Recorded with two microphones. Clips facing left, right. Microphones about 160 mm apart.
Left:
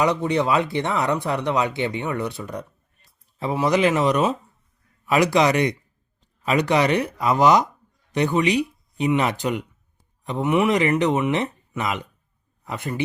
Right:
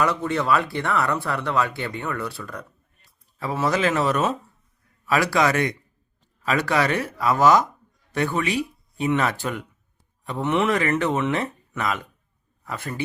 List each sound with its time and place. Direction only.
0.0 s speech: 20° left (ahead or behind)